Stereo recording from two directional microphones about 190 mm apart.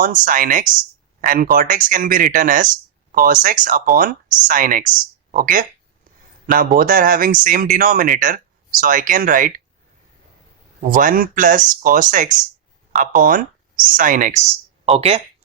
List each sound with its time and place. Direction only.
0.0 s speech: 45° right (ahead or behind)
10.8 s speech: 45° right (ahead or behind)
14.8 s speech: 30° right (ahead or behind)